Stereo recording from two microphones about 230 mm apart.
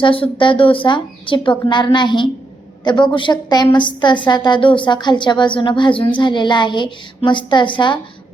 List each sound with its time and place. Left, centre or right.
0.0 s a woman's voice: left